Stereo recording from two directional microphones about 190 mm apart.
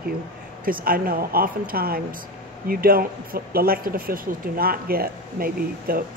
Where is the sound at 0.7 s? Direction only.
50° right (ahead or behind).